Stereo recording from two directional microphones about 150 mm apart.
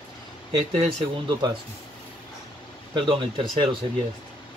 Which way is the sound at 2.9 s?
35° right (ahead or behind).